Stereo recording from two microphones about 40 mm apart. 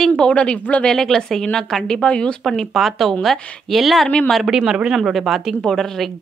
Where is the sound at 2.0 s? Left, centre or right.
Left.